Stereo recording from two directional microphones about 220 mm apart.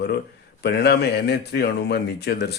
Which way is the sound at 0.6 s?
50° left (ahead or behind).